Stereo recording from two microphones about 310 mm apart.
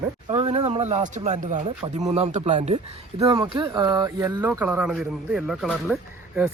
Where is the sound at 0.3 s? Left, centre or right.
Centre.